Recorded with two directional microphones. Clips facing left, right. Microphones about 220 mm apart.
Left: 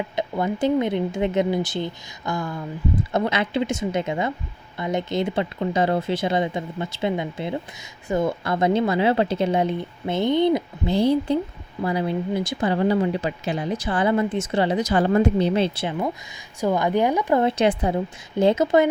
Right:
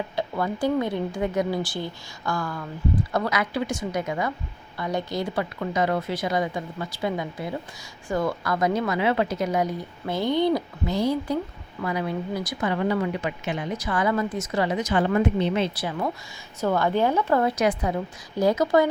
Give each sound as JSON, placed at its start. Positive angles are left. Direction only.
{"t": 0.2, "sound": "a woman's voice", "side_deg": 20}
{"t": 16.6, "sound": "a woman's voice", "side_deg": 15}